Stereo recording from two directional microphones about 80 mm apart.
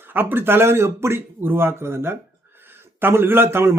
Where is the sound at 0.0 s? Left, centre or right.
Right.